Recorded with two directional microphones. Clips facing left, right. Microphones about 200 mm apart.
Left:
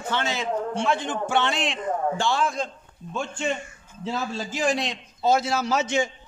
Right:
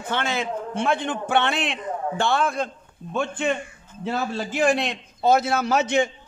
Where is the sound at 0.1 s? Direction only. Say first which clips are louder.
Right 1 dB; 55° right (ahead or behind).